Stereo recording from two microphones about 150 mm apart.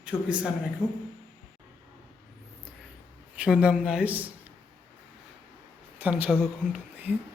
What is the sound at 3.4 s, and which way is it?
Speech, 5° right (ahead or behind).